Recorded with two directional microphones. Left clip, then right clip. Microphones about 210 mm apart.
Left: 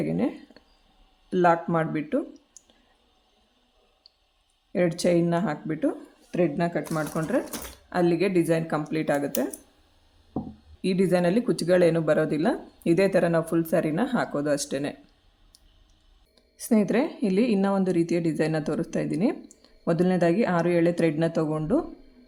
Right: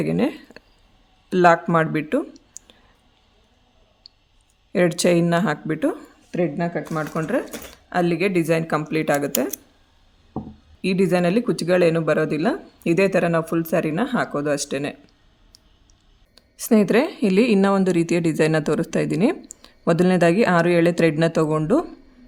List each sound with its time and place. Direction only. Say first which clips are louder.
0.0 s speech: right 5 dB; 35° right (ahead or behind)
4.7 s a woman's voice: right 5 dB; 30° right (ahead or behind)
6.3 s speech: right 2 dB; 15° right (ahead or behind)
10.8 s speech: right 3 dB; 20° right (ahead or behind)
16.3 s a woman's voice: right 6 dB; 30° right (ahead or behind)